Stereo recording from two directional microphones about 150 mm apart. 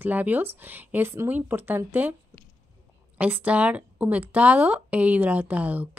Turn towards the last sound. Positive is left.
turn(degrees=-10)  # may be behind; listen again after turning